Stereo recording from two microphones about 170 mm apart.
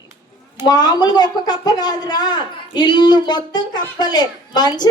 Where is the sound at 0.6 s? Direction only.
25° left (ahead or behind).